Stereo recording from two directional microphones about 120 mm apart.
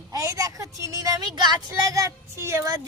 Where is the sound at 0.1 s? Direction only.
30° right (ahead or behind).